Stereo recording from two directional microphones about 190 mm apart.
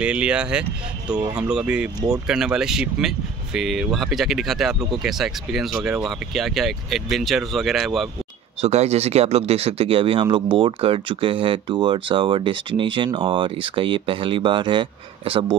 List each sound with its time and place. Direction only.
0.0 s speech: 5° right (ahead or behind)
8.5 s speech: 35° right (ahead or behind)